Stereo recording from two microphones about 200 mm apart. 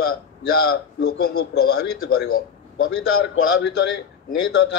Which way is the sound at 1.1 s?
50° left (ahead or behind).